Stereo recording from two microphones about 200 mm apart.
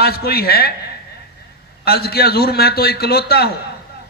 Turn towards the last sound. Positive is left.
turn(degrees=50)  # may be behind; listen again after turning